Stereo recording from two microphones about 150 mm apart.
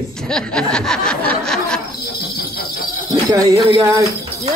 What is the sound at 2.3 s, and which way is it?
Jingle bell, 90° left.